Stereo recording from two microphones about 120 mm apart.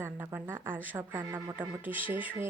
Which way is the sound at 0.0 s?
20° right (ahead or behind).